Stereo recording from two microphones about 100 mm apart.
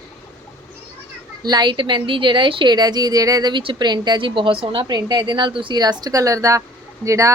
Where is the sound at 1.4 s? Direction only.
45° right (ahead or behind).